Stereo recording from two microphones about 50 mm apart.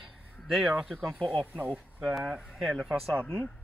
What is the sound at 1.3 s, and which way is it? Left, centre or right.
Speech, left.